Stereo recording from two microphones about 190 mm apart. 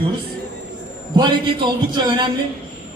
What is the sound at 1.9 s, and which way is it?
Speech, 25° right (ahead or behind).